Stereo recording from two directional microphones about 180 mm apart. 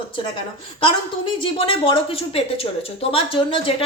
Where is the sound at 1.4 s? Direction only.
30° left (ahead or behind).